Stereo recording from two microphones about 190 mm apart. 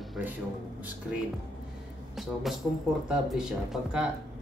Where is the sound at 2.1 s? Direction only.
Centre (ahead or behind).